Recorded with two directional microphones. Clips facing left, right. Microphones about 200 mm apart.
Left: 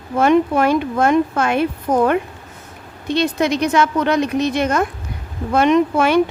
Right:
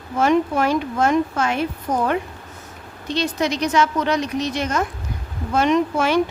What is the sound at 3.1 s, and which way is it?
A woman's voice, 55° left (ahead or behind).